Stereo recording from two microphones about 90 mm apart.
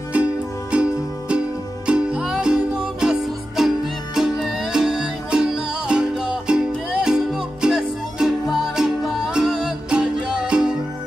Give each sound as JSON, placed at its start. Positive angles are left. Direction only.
{"t": 0.1, "sound": "music", "side_deg": -15}
{"t": 1.9, "sound": "music", "side_deg": -10}